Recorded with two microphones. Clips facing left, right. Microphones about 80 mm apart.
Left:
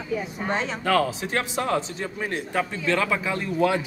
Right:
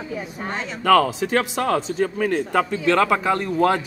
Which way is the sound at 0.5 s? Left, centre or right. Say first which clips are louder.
Left 4 dB; left.